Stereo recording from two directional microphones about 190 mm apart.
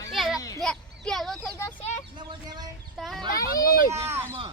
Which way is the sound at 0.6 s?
Centre (ahead or behind).